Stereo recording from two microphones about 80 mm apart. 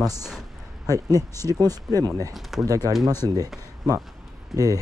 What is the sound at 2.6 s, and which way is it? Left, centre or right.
Speech, right.